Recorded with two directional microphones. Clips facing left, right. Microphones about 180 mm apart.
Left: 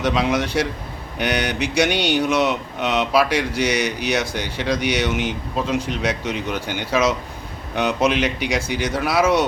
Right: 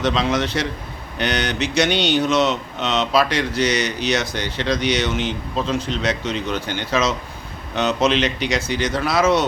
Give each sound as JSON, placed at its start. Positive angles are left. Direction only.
{"t": 0.0, "sound": "speech", "side_deg": 10}